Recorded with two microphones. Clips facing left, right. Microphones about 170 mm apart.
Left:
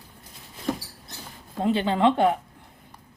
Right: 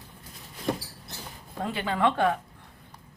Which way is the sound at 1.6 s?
25° left (ahead or behind).